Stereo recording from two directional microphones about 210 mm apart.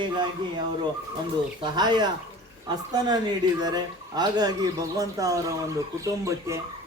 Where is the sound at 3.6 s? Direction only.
20° right (ahead or behind).